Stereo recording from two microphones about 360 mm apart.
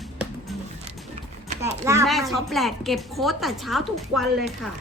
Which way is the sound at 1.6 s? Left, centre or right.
Centre.